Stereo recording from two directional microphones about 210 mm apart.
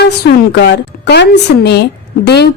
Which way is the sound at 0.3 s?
55° left (ahead or behind).